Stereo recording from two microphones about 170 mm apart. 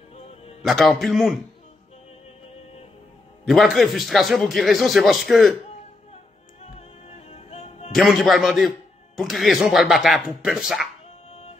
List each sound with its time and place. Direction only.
0.6 s a man's voice: centre (ahead or behind)
3.4 s a man's voice: centre (ahead or behind)
7.1 s music: 40° left (ahead or behind)
7.9 s a man's voice: centre (ahead or behind)